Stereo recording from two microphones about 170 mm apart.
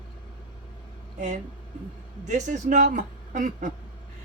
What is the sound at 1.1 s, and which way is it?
A man's voice, 45° right (ahead or behind).